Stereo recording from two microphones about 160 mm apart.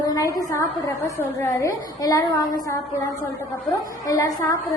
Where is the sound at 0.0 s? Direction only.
25° left (ahead or behind).